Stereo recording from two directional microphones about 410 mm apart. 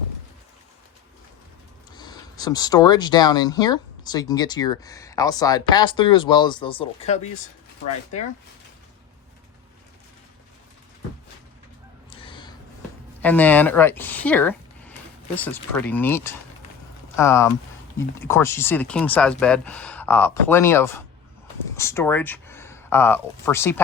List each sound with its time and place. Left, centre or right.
2.0 s speech: centre
12.1 s gasp: centre
13.2 s speech: centre